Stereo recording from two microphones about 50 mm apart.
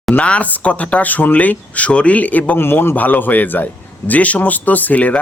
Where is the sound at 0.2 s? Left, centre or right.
Left.